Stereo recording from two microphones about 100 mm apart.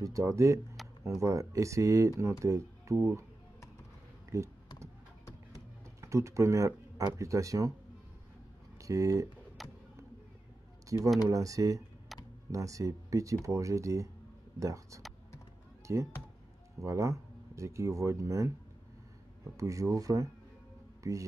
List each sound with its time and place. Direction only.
0.0 s speech: 35° right (ahead or behind)
4.3 s speech: 30° right (ahead or behind)
5.9 s speech: 30° right (ahead or behind)
8.8 s speech: 30° right (ahead or behind)
9.6 s a sound: centre (ahead or behind)
10.9 s speech: 35° right (ahead or behind)
19.5 s speech: 30° right (ahead or behind)